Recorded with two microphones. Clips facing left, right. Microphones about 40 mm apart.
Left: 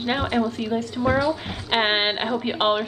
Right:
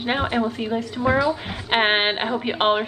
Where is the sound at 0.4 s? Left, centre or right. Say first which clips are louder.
Even; right.